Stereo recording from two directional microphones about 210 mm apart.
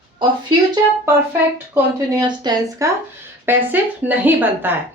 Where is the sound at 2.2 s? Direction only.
20° right (ahead or behind).